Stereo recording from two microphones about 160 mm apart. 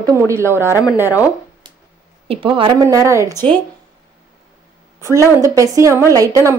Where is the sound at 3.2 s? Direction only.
15° left (ahead or behind).